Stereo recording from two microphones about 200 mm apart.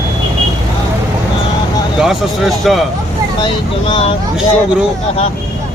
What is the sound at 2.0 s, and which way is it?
Speech, centre (ahead or behind).